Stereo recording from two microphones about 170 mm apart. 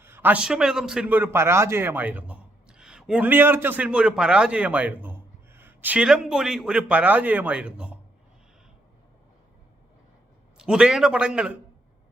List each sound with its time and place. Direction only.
0.0 s a man's voice: 10° right (ahead or behind)
10.6 s a man's voice: 5° right (ahead or behind)